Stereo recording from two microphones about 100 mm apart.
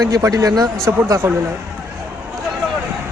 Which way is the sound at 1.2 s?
25° right (ahead or behind).